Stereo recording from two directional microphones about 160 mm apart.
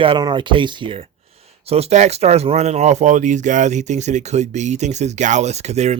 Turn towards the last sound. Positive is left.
turn(degrees=-45)  # may be behind; listen again after turning